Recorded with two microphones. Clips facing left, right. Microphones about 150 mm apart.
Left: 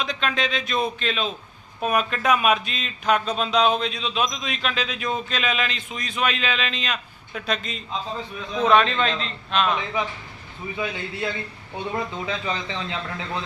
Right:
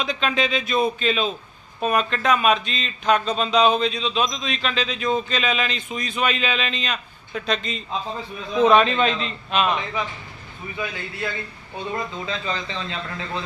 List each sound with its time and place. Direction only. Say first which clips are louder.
0.0 s speech: right 2 dB; centre (ahead or behind)
10.8 s a man's voice: left 1 dB; 20° left (ahead or behind)